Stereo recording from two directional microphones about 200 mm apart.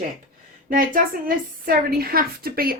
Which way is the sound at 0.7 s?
45° right (ahead or behind).